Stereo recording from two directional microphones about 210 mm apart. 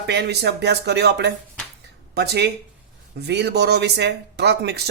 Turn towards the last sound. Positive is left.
turn(degrees=-50)  # may be behind; listen again after turning